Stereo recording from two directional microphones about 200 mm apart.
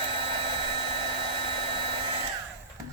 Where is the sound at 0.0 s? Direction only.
25° right (ahead or behind).